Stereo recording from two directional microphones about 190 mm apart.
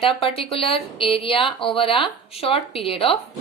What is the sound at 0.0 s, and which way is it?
Speech, 30° left (ahead or behind).